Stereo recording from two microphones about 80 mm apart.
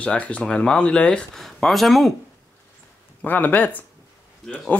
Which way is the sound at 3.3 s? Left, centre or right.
Left.